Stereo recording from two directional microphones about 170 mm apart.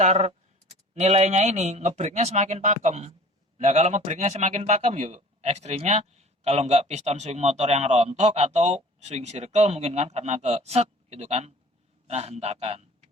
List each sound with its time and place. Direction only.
0.0 s a man's voice: 40° right (ahead or behind)